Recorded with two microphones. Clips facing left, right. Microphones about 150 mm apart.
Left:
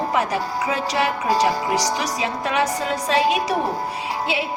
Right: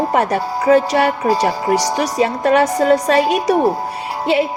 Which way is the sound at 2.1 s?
50° right (ahead or behind).